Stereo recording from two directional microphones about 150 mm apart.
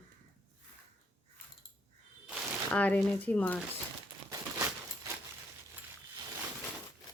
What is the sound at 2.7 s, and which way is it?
Speech, 10° left (ahead or behind).